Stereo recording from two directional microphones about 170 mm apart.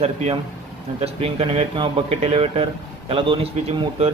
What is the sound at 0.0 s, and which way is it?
A man's voice, 35° right (ahead or behind).